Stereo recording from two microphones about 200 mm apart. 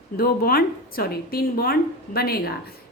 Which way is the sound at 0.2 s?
50° left (ahead or behind).